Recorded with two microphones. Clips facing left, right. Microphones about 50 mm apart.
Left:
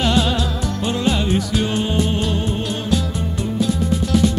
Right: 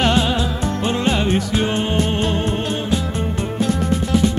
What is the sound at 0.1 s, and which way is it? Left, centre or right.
Music, right.